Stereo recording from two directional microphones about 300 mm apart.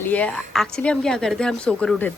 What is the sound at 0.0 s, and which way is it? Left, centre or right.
Speech, centre.